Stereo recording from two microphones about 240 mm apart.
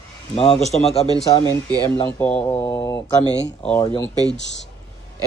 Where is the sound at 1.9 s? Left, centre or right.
Centre.